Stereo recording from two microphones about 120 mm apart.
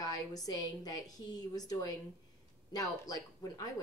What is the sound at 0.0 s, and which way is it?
A woman's voice, 30° left (ahead or behind).